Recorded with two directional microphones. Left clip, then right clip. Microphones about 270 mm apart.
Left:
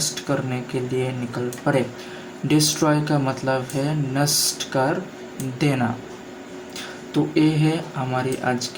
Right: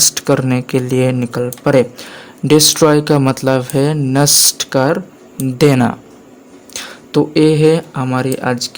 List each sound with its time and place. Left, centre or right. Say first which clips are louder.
0.0 s speech: right 11 dB; right